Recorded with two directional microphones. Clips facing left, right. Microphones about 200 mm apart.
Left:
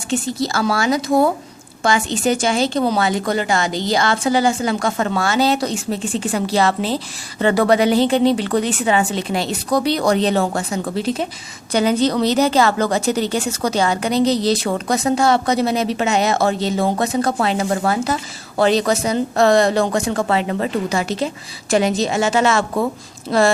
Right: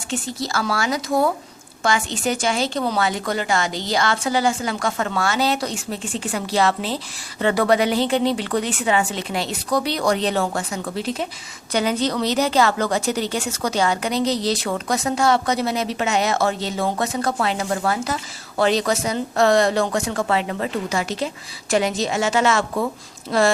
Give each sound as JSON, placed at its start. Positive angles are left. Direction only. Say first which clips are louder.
{"t": 0.1, "sound": "a woman's voice", "louder": "left 5 dB", "side_deg": 25}